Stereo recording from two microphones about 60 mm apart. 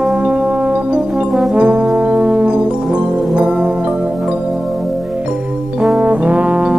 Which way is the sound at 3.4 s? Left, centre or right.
Centre.